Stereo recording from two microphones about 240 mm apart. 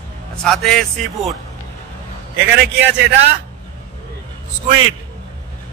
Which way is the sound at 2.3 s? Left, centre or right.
Right.